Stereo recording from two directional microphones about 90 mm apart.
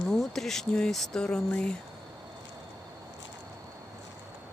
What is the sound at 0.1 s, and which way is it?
Speech, 5° left (ahead or behind).